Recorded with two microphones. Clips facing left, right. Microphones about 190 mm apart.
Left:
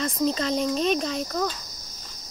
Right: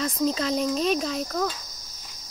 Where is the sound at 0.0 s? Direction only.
5° right (ahead or behind).